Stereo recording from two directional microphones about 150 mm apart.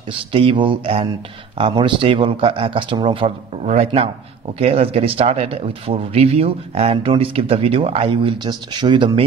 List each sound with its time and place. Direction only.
0.3 s speech: 35° right (ahead or behind)
3.6 s speech: 45° right (ahead or behind)